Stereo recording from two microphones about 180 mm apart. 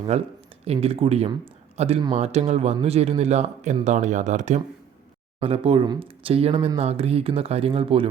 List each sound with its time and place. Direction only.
0.1 s speech: 35° right (ahead or behind)
5.4 s speech: 30° right (ahead or behind)